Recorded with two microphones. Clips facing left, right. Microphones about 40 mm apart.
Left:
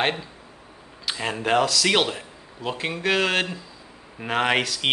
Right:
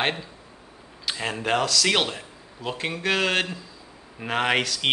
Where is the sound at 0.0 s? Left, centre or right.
Centre.